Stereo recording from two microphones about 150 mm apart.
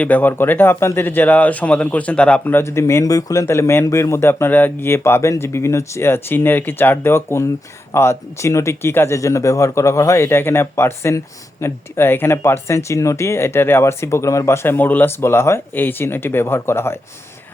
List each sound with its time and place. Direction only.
0.0 s speech: 10° left (ahead or behind)